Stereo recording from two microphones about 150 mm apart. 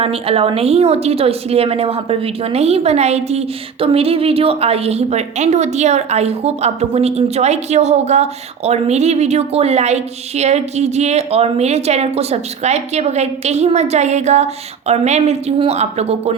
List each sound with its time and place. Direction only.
0.0 s a woman's voice: 40° right (ahead or behind)